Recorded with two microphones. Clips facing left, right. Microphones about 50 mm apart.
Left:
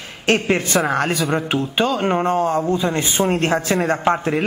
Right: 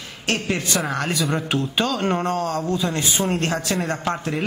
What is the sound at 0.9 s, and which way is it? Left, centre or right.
Speech, centre.